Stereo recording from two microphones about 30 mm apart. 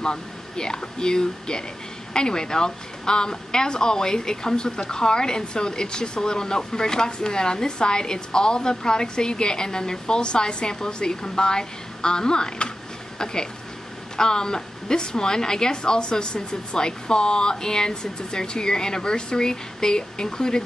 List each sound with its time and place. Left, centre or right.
0.0 s a woman's voice: left